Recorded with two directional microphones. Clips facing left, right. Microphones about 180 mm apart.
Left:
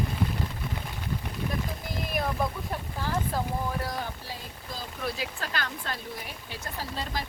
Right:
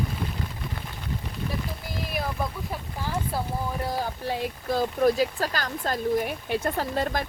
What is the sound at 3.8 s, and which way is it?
Speech, 30° right (ahead or behind).